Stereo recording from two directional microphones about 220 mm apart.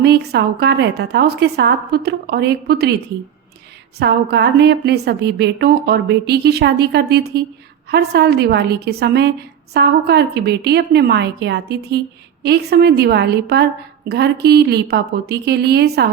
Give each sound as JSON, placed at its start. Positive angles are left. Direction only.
{"t": 0.0, "sound": "a woman's voice", "side_deg": -50}
{"t": 4.0, "sound": "a woman's voice", "side_deg": -50}